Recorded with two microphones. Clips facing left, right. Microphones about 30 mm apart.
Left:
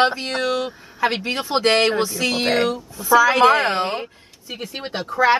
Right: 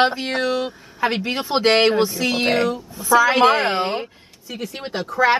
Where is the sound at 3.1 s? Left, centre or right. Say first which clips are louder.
Left 1 dB; centre.